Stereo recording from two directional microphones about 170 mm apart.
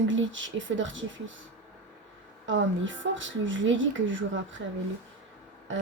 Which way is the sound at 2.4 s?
90° right.